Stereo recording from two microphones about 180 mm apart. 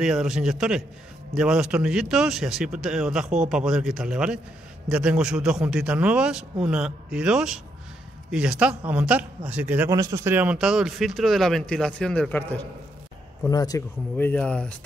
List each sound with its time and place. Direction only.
0.0 s a man's voice: 5° right (ahead or behind)
13.5 s speech: 20° left (ahead or behind)
14.1 s speech: 10° left (ahead or behind)